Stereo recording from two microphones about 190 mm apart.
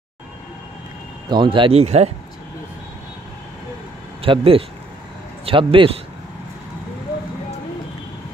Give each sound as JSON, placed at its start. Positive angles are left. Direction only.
{"t": 1.3, "sound": "speech", "side_deg": -25}
{"t": 4.2, "sound": "speech", "side_deg": -30}